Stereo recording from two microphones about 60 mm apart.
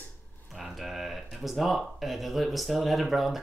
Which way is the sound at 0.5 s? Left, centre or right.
Centre.